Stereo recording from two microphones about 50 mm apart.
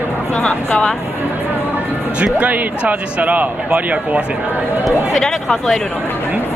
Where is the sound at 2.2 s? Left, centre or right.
Right.